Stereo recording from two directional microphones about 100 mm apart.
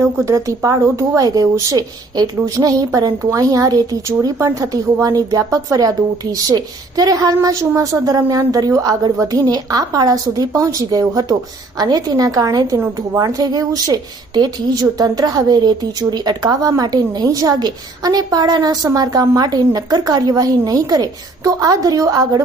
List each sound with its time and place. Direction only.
0.0 s a woman's voice: 30° right (ahead or behind)